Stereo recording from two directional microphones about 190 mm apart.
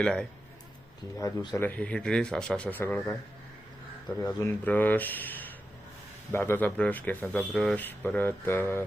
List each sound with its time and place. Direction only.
0.0 s speech: 5° left (ahead or behind)
1.2 s speech: 20° left (ahead or behind)
1.6 s speech: 5° left (ahead or behind)
4.2 s speech: 15° left (ahead or behind)